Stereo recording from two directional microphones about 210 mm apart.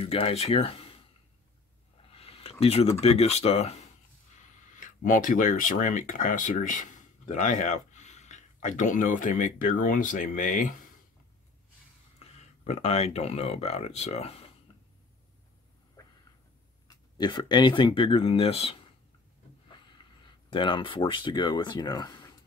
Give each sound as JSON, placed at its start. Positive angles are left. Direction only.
{"t": 0.0, "sound": "speech", "side_deg": 25}
{"t": 12.2, "sound": "speech", "side_deg": 30}
{"t": 16.8, "sound": "speech", "side_deg": 20}